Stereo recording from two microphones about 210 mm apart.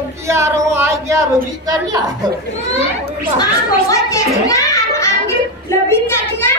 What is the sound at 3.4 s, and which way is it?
A child's voice, 15° left (ahead or behind).